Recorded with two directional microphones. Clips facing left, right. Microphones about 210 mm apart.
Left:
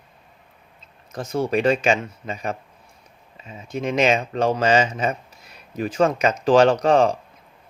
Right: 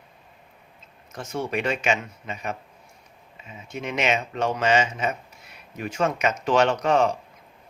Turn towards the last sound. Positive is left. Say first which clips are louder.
# left 4 dB
turn(degrees=35)  # may be behind; listen again after turning